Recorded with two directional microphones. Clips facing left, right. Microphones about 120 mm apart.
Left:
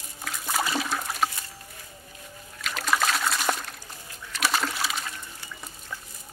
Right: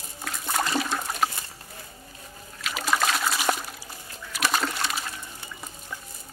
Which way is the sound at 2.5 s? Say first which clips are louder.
Even; 5° right (ahead or behind).